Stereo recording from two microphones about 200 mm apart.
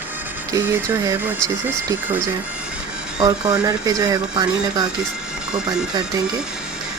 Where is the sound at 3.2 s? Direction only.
20° right (ahead or behind).